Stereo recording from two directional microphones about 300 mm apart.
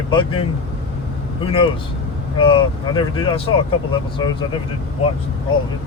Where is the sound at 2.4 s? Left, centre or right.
Centre.